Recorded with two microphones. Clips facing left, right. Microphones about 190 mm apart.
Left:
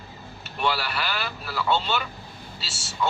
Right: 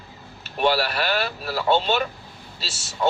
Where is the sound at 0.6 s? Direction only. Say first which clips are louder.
Right 6 dB; 35° right (ahead or behind).